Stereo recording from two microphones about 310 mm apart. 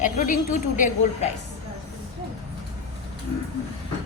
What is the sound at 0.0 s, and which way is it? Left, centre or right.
A woman's voice, left.